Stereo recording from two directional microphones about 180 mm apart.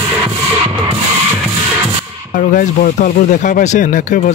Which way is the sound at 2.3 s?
50° left (ahead or behind).